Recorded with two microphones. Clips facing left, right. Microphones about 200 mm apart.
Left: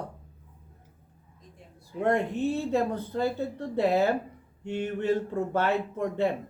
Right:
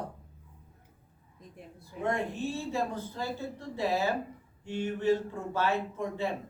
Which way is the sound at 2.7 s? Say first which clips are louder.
Left 6 dB; 60° left (ahead or behind).